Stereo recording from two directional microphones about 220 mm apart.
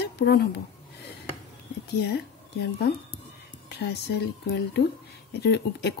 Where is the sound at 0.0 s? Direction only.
45° left (ahead or behind).